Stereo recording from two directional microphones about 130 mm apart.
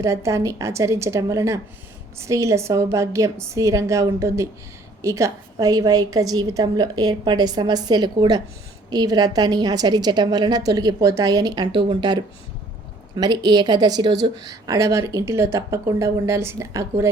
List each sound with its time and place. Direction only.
0.0 s a woman's voice: 25° right (ahead or behind)